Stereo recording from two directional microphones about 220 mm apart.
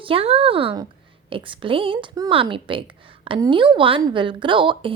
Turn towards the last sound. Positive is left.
turn(degrees=-20)  # may be behind; listen again after turning